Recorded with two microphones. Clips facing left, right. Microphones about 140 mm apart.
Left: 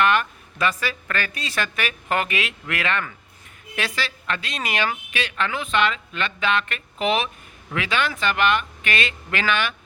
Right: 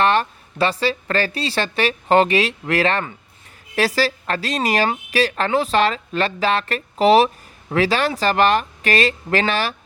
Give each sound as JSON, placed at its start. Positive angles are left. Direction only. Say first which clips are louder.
{"t": 0.0, "sound": "a woman's voice", "louder": "right 3 dB", "side_deg": -30}